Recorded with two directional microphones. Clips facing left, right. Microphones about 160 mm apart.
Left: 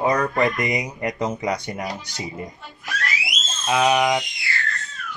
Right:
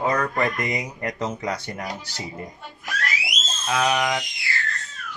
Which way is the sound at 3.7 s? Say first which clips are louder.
Left 4 dB; 15° left (ahead or behind).